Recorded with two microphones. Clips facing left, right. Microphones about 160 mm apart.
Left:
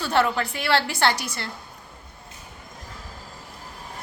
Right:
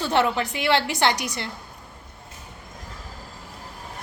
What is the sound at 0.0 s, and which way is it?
A woman's voice, 20° right (ahead or behind).